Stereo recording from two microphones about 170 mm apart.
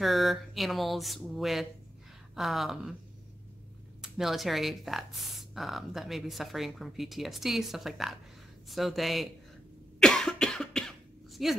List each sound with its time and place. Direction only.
0.0 s speech: centre (ahead or behind)
4.0 s speech: centre (ahead or behind)
9.9 s cough: centre (ahead or behind)